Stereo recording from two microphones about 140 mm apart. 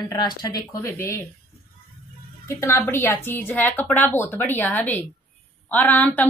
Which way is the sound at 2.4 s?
20° left (ahead or behind).